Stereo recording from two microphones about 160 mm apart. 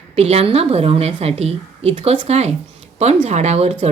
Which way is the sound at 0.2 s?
40° right (ahead or behind).